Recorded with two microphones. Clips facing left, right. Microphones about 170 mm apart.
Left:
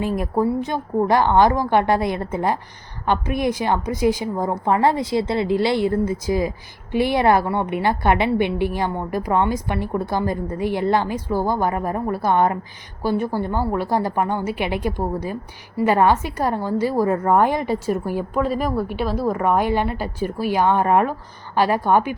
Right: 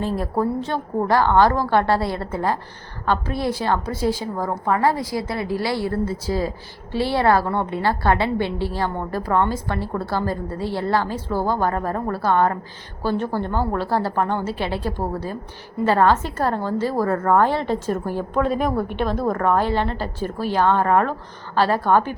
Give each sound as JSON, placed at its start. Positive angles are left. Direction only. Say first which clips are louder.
{"t": 0.0, "sound": "a woman's voice", "louder": "left 2 dB", "side_deg": 15}